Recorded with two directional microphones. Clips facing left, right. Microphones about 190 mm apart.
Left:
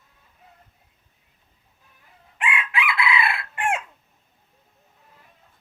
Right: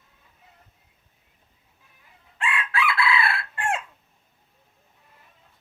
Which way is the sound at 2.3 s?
15° left (ahead or behind).